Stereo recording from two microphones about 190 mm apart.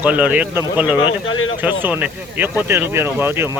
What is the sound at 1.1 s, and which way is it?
Speech, 90° left.